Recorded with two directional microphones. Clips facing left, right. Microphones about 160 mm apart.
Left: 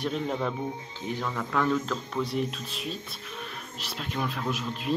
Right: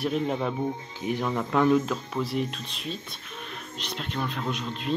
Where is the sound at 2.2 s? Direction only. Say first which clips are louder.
Right 1 dB; centre (ahead or behind).